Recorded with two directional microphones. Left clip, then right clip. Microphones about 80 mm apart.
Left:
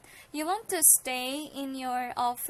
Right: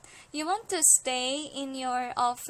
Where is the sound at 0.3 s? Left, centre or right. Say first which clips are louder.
Right 1 dB; centre.